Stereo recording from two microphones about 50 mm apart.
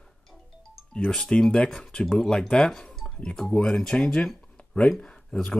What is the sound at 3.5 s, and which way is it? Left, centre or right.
Speech, centre.